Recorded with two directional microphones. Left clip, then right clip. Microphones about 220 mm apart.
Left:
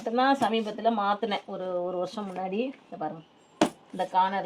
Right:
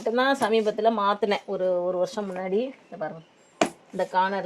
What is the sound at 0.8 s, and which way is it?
Speech, 40° right (ahead or behind).